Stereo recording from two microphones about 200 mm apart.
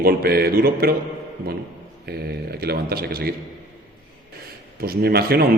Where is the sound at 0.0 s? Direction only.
50° right (ahead or behind).